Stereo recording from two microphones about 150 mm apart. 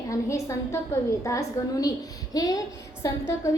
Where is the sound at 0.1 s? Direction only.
20° left (ahead or behind).